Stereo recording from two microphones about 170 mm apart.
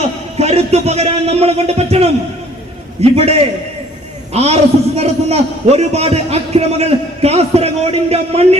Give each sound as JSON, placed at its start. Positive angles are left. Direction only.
{"t": 0.0, "sound": "a man's voice", "side_deg": -40}